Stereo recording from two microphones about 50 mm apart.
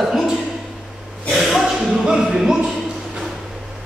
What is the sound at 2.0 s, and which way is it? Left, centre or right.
Music, centre.